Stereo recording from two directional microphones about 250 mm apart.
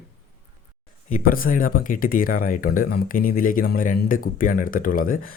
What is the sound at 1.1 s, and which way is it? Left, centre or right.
Speech, left.